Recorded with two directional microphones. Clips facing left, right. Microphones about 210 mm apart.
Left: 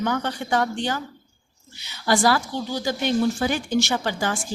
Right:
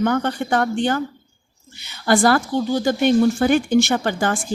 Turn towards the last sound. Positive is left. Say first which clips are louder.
# right 5 dB
turn(degrees=-55)  # may be behind; listen again after turning